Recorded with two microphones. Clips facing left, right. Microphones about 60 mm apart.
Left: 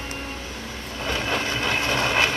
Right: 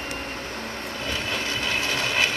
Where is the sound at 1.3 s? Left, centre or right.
Left.